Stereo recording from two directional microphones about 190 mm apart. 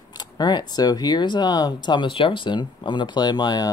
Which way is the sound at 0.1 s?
20° left (ahead or behind).